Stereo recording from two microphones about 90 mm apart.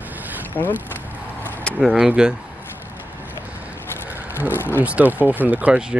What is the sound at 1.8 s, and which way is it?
Speech, 10° right (ahead or behind).